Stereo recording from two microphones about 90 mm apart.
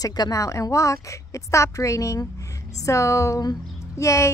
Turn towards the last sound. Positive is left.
turn(degrees=35)  # may be behind; listen again after turning